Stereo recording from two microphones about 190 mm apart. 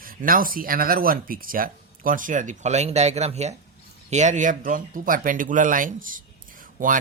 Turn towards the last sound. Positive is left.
turn(degrees=-45)  # may be behind; listen again after turning